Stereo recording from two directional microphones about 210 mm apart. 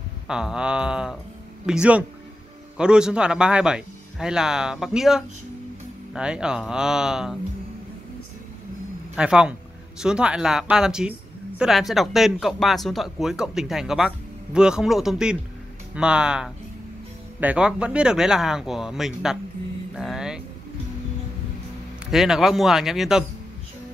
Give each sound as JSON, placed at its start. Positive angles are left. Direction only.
{"t": 0.3, "sound": "speech", "side_deg": -5}
{"t": 9.1, "sound": "speech", "side_deg": -5}
{"t": 20.0, "sound": "music", "side_deg": 0}
{"t": 22.0, "sound": "speech", "side_deg": 0}